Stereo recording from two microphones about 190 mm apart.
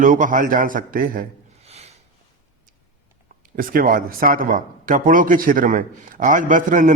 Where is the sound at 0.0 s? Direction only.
45° right (ahead or behind).